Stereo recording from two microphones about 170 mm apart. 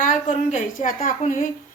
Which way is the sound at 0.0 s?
45° left (ahead or behind).